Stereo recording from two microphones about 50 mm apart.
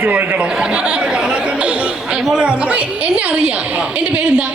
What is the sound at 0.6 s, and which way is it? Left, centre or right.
A woman's voice, right.